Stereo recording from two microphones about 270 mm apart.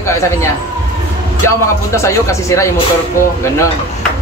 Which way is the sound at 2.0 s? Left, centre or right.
Centre.